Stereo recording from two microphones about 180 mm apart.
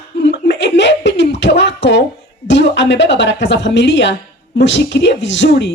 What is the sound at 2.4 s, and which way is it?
A woman's voice, 80° left.